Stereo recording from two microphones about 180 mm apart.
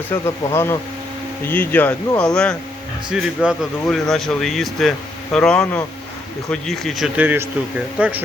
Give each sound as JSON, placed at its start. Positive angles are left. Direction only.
{"t": 0.1, "sound": "speech", "side_deg": 15}